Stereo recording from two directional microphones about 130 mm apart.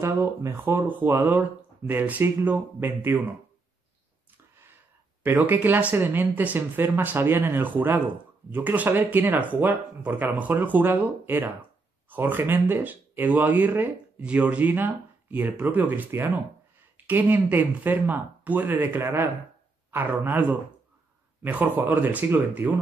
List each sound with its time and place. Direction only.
0.0 s speech: 20° right (ahead or behind)
5.2 s speech: 15° right (ahead or behind)